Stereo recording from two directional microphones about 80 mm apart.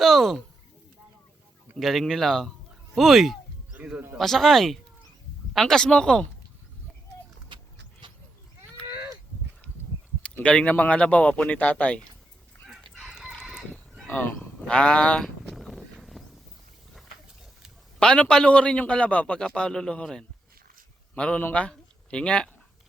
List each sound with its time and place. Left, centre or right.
0.0 s speech: centre
1.8 s speech: centre
3.8 s speech: centre
4.2 s a man's voice: centre
10.2 s a man's voice: centre
12.6 s chicken: centre
13.1 s chicken: centre
13.4 s chicken: centre
14.1 s speech: left
14.3 s livestock: centre
15.4 s a sound: centre
18.0 s a man's voice: centre